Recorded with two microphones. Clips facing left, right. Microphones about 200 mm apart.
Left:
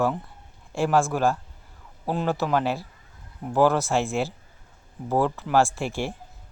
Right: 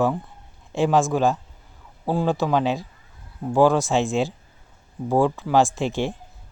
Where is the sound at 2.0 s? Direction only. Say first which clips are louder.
Right 3 dB; 15° right (ahead or behind).